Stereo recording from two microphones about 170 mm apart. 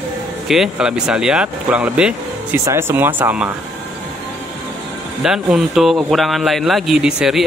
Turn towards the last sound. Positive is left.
turn(degrees=-5)  # may be behind; listen again after turning